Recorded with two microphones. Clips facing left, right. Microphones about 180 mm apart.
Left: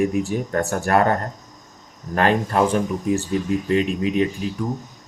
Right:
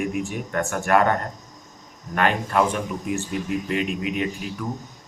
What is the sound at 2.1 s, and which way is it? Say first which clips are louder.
Speech: left 3 dB; 35° left (ahead or behind).